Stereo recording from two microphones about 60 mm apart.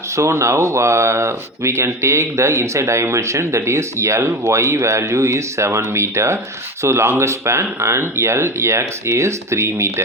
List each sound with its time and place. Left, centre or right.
0.2 s speech: right